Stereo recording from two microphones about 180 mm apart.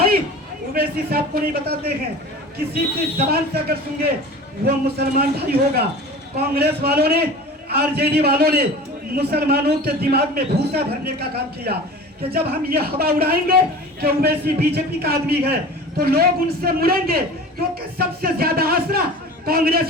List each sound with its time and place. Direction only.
0.7 s speech: 60° right (ahead or behind)
3.2 s a man's voice: 60° right (ahead or behind)